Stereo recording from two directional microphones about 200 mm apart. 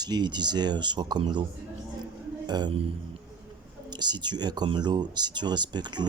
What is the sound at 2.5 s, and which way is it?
Speech, 20° right (ahead or behind).